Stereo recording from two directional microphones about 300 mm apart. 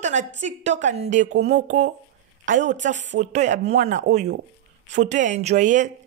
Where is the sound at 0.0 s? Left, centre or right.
Right.